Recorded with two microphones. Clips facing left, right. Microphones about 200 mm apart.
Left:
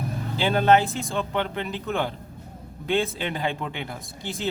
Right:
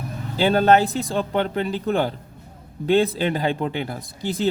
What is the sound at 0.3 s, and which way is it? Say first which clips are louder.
Speech: right 3 dB; 40° right (ahead or behind).